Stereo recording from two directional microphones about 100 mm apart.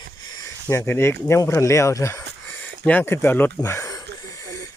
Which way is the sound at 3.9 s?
35° left (ahead or behind).